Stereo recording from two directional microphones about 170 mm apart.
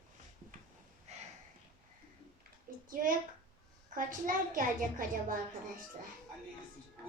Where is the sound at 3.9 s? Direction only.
55° right (ahead or behind).